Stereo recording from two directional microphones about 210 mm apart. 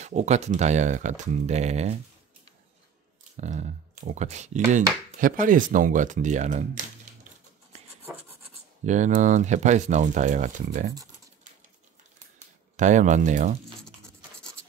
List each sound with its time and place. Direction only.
0.0 s speech: 35° right (ahead or behind)
3.3 s speech: 35° right (ahead or behind)
8.8 s speech: 35° right (ahead or behind)
12.7 s speech: 35° right (ahead or behind)